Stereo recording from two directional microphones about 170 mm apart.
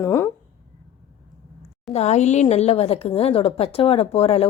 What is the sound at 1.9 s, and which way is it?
A woman's voice, 40° left (ahead or behind).